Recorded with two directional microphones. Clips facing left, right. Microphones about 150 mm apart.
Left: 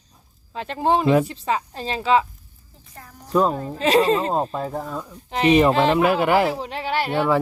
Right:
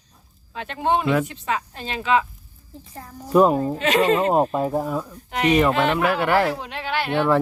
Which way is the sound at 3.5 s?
30° right (ahead or behind).